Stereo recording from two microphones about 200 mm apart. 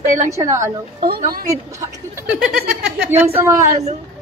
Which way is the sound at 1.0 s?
50° right (ahead or behind).